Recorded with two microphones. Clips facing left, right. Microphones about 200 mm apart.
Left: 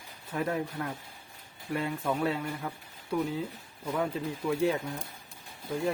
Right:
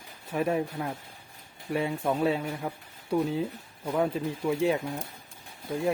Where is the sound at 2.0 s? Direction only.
20° right (ahead or behind).